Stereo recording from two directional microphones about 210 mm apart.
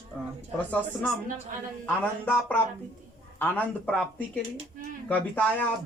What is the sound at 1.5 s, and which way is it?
Speech, 40° right (ahead or behind).